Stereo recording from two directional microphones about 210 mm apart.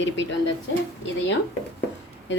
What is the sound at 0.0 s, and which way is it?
Speech, 60° left (ahead or behind).